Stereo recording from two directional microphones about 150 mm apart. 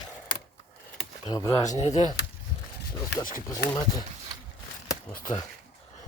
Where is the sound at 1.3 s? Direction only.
25° left (ahead or behind).